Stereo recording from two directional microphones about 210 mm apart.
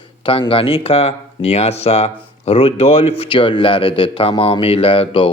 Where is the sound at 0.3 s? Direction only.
25° left (ahead or behind).